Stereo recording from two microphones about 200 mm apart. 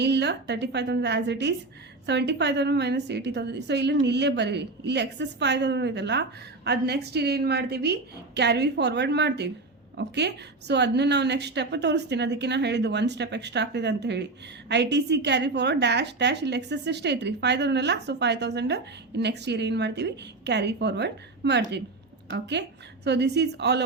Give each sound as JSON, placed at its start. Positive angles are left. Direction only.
{"t": 0.0, "sound": "a woman's voice", "side_deg": -55}